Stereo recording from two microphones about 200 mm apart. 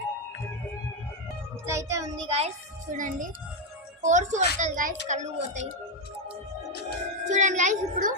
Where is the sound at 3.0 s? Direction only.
40° right (ahead or behind).